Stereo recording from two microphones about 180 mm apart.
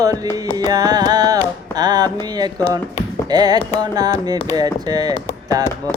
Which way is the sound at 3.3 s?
20° right (ahead or behind).